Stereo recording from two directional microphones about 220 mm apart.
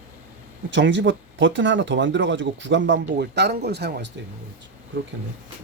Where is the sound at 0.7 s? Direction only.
55° right (ahead or behind).